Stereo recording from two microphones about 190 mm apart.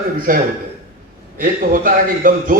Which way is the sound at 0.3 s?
45° right (ahead or behind).